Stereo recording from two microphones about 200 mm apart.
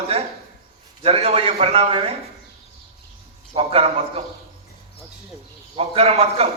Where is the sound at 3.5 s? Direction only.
30° right (ahead or behind).